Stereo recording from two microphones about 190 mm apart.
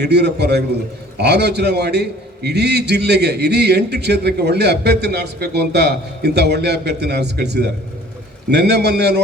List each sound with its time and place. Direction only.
0.0 s a man's voice: 60° right (ahead or behind)